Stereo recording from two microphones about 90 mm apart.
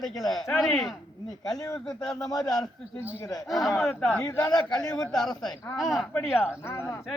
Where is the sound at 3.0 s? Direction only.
25° left (ahead or behind).